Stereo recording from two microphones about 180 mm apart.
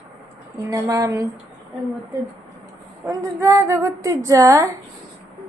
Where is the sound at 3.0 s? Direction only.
15° right (ahead or behind).